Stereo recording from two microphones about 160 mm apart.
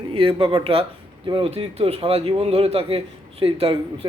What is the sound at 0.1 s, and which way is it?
A man's voice, 35° right (ahead or behind).